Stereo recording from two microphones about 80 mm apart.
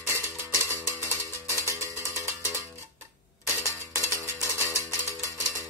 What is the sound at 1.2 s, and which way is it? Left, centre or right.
Cowbell, right.